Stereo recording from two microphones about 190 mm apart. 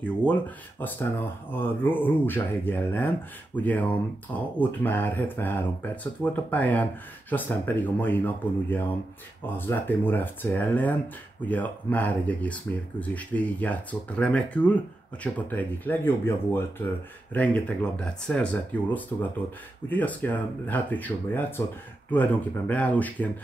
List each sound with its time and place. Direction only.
0.0 s speech: 5° left (ahead or behind)